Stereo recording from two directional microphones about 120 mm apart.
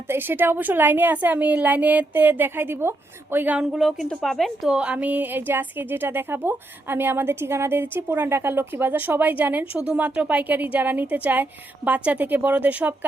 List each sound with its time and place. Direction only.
0.1 s a woman's voice: 15° right (ahead or behind)